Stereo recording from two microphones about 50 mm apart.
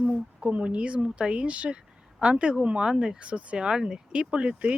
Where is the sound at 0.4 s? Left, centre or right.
Right.